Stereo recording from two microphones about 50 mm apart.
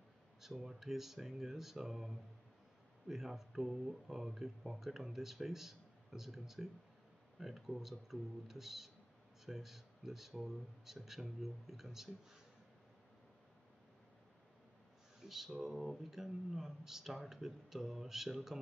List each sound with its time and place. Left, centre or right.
0.4 s speech: centre
15.2 s speech: centre